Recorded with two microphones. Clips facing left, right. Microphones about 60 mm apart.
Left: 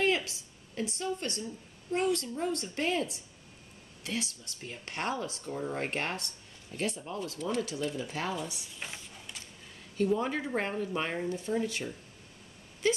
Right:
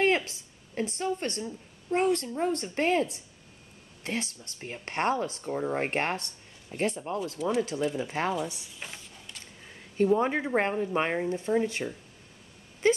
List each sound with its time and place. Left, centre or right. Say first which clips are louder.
0.0 s a woman's voice: right 4 dB; right
7.4 s speech: right 5 dB; centre
7.9 s speech: right 5 dB; right
8.7 s a sound: even; centre
9.9 s speech: right 5 dB; right
12.8 s wail: right 5 dB; right